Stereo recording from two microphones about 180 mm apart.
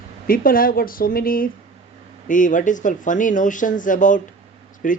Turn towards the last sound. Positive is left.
turn(degrees=50)  # may be behind; listen again after turning